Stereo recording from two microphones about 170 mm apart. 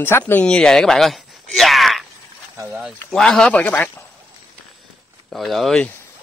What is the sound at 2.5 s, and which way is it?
Speech, 15° right (ahead or behind).